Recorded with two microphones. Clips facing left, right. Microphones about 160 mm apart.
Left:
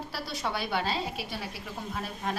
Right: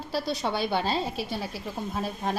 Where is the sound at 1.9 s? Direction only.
30° right (ahead or behind).